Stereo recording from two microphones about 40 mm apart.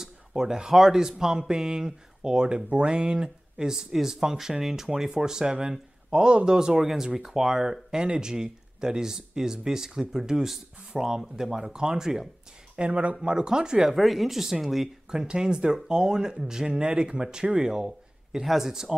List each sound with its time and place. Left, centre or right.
0.0 s a sound: centre
0.9 s speech: centre
5.1 s speech: centre
12.7 s speech: right
13.8 s speech: centre
15.0 s speech: centre